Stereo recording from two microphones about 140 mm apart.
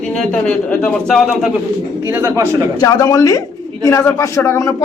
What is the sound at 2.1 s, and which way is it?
Speech, 20° right (ahead or behind).